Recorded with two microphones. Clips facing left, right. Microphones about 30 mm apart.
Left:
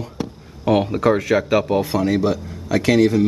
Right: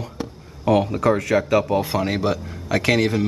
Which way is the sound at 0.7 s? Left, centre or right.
Centre.